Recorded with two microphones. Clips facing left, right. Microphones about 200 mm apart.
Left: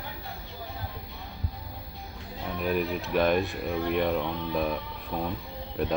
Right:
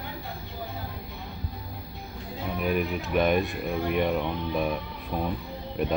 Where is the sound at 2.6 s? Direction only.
5° right (ahead or behind).